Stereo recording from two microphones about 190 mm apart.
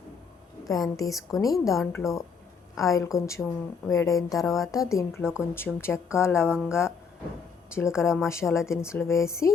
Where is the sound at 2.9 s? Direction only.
15° left (ahead or behind).